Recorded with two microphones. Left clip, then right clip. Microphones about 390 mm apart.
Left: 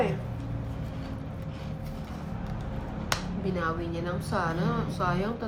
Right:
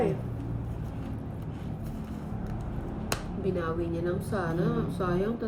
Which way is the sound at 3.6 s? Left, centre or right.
Left.